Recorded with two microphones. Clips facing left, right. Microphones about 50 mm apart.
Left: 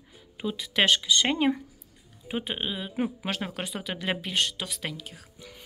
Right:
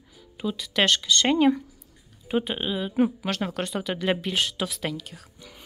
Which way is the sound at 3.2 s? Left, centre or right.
Centre.